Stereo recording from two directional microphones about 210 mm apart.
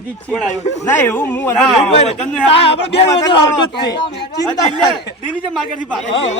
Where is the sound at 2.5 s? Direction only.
30° left (ahead or behind).